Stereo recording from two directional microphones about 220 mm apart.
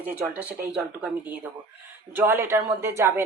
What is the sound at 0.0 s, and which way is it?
Speech, 5° right (ahead or behind).